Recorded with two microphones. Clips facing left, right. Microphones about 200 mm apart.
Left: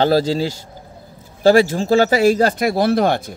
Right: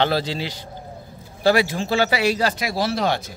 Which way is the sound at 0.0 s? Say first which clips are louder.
Left 6 dB; 40° left (ahead or behind).